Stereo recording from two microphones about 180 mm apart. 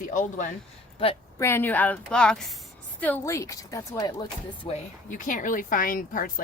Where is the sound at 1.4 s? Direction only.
10° left (ahead or behind).